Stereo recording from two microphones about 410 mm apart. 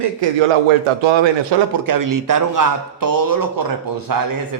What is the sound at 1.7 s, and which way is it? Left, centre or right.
Speech, right.